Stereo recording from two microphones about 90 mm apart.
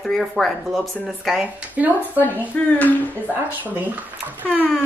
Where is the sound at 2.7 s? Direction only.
20° left (ahead or behind).